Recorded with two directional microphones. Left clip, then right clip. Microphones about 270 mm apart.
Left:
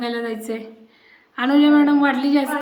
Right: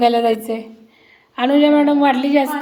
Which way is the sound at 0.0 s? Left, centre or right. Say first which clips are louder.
Right 11 dB; centre.